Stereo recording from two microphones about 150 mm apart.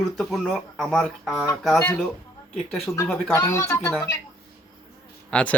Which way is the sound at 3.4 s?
20° left (ahead or behind).